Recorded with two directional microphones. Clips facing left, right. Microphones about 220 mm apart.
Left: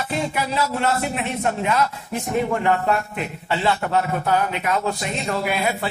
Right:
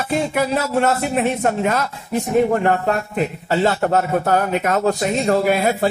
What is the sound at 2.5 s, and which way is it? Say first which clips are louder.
A man's voice: right 3 dB; 40° right (ahead or behind).